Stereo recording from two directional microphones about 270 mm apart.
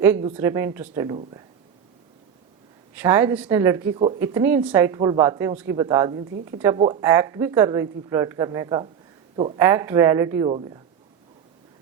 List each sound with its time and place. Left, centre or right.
0.0 s speech: centre
2.9 s speech: centre
9.6 s speech: centre